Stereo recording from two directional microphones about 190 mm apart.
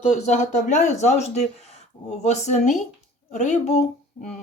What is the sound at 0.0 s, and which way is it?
A woman's voice, 35° left (ahead or behind).